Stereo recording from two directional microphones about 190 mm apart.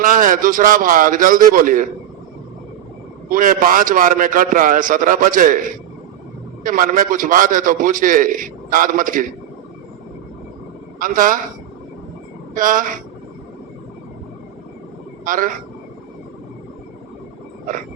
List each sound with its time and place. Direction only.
0.0 s a man's voice: 45° right (ahead or behind)
3.2 s a man's voice: 45° right (ahead or behind)
11.0 s a man's voice: 45° right (ahead or behind)
12.5 s a man's voice: 45° right (ahead or behind)
15.2 s a man's voice: 45° right (ahead or behind)